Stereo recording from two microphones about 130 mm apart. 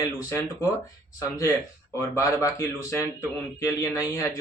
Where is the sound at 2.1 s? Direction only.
25° left (ahead or behind).